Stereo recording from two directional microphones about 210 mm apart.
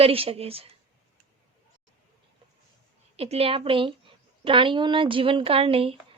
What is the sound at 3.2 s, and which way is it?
Speech, 30° right (ahead or behind).